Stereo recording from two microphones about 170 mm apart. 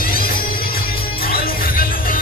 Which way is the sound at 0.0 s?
60° left (ahead or behind).